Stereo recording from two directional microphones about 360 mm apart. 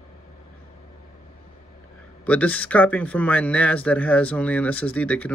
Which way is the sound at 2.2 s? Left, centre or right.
Centre.